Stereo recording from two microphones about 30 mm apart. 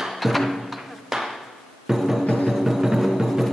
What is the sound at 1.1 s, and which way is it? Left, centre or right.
Hammer, centre.